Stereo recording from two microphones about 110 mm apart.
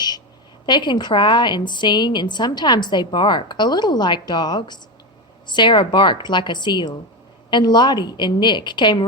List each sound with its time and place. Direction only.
0.6 s a woman's voice: 45° left (ahead or behind)